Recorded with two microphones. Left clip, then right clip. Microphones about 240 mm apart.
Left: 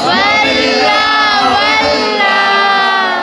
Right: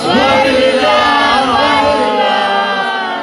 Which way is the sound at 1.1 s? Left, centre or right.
Left.